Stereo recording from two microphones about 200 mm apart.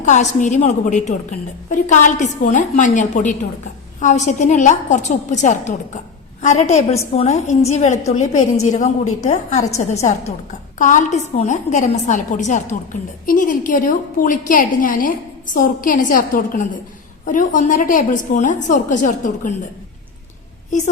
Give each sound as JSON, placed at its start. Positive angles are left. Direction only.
{"t": 0.0, "sound": "a woman's voice", "side_deg": 35}
{"t": 20.7, "sound": "a woman's voice", "side_deg": 40}